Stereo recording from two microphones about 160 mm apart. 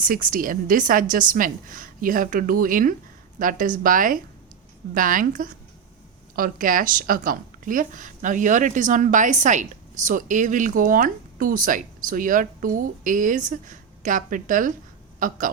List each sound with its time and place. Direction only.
0.0 s a woman's voice: 60° right (ahead or behind)